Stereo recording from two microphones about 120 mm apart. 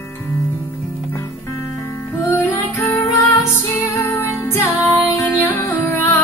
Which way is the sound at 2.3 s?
20° left (ahead or behind).